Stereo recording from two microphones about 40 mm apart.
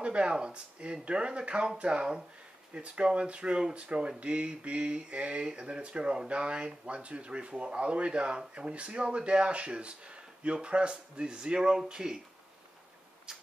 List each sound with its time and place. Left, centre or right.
0.0 s speech: right